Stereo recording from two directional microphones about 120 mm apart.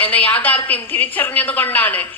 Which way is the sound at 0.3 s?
15° left (ahead or behind).